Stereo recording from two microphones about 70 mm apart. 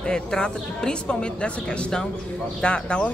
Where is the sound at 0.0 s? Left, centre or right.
Centre.